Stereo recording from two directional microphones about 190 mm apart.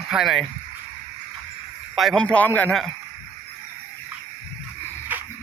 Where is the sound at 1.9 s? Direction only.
Centre (ahead or behind).